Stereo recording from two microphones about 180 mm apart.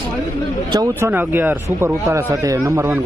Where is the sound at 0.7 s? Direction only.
15° right (ahead or behind).